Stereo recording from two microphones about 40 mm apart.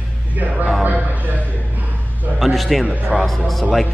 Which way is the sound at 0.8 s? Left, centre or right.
Right.